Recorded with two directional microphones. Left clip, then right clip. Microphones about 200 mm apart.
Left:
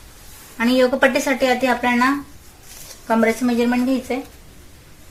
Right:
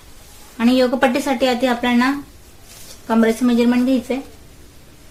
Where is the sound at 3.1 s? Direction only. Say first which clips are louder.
Right 1 dB; 25° right (ahead or behind).